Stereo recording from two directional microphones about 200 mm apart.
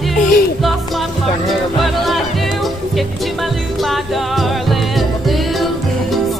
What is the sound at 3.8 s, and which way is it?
Music, centre (ahead or behind).